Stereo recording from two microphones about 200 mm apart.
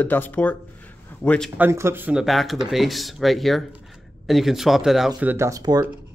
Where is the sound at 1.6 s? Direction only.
15° right (ahead or behind).